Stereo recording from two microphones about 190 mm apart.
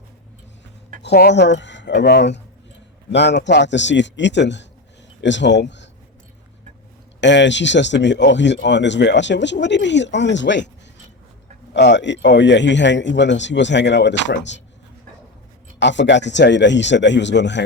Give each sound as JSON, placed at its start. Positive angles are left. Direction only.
{"t": 1.0, "sound": "speech", "side_deg": 60}
{"t": 7.2, "sound": "speech", "side_deg": 70}
{"t": 11.7, "sound": "speech", "side_deg": 65}
{"t": 15.8, "sound": "speech", "side_deg": 70}